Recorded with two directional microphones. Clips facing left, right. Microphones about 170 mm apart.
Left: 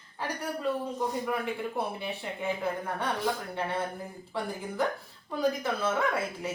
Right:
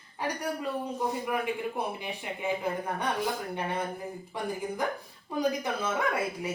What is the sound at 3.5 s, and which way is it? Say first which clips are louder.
A woman's voice: even; 15° right (ahead or behind).